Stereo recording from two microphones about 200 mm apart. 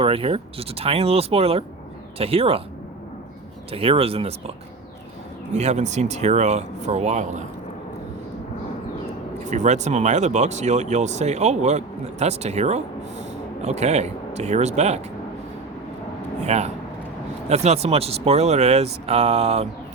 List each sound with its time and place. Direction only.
0.0 s speech: 30° right (ahead or behind)
3.7 s speech: 30° right (ahead or behind)
5.5 s speech: 35° right (ahead or behind)
9.5 s speech: 35° right (ahead or behind)
16.5 s speech: 35° right (ahead or behind)